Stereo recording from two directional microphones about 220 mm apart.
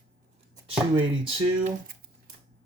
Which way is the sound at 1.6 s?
40° right (ahead or behind).